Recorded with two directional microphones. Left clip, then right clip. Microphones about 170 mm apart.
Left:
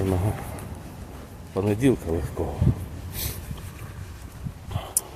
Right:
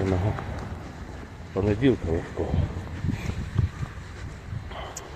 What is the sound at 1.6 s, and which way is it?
Speech, 25° left (ahead or behind).